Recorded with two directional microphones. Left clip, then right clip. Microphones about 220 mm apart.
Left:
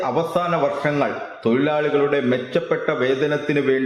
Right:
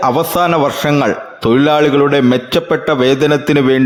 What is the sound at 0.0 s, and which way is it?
A man's voice, 50° right (ahead or behind).